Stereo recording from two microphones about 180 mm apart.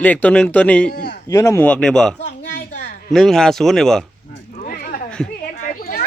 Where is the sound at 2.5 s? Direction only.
70° left (ahead or behind).